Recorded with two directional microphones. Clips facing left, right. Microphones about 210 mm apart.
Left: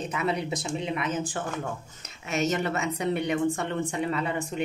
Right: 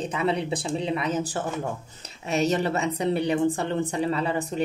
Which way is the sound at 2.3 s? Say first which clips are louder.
Right 3 dB; 35° right (ahead or behind).